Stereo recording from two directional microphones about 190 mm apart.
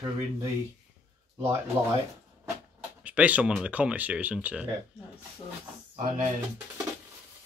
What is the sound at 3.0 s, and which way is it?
Speech, 5° right (ahead or behind).